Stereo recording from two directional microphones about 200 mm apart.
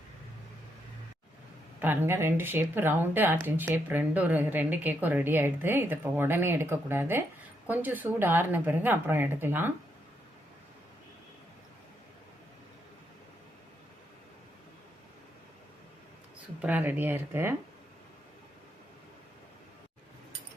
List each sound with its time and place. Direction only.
1.8 s speech: 10° right (ahead or behind)
16.6 s speech: 10° right (ahead or behind)